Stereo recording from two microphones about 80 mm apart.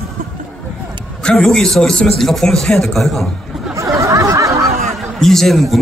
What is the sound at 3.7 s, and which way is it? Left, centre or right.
Snicker, right.